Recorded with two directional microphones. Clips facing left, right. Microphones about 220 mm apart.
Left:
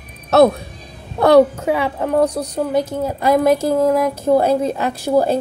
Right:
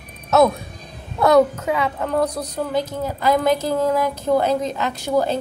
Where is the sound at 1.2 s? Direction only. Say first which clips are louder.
Left 4 dB; 30° left (ahead or behind).